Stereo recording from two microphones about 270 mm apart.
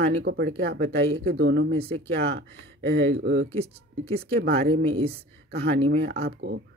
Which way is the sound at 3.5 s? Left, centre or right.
Right.